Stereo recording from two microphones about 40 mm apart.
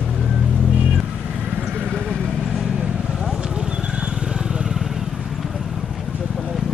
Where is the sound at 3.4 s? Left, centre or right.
Right.